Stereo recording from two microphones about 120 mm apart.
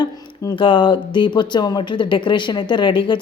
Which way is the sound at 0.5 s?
45° left (ahead or behind).